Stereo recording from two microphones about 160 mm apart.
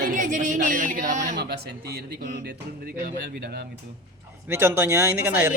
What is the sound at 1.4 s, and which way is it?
Speech, 90° right.